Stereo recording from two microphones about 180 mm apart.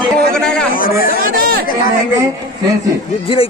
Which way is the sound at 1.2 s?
55° right (ahead or behind).